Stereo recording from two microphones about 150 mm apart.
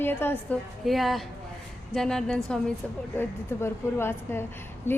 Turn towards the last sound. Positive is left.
turn(degrees=15)  # may be behind; listen again after turning